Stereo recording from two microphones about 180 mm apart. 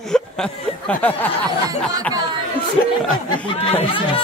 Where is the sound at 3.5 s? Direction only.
35° left (ahead or behind).